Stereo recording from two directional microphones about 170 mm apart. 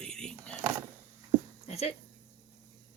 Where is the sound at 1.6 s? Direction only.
40° left (ahead or behind).